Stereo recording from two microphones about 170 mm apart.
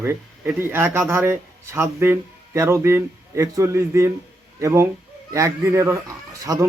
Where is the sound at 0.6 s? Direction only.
10° right (ahead or behind).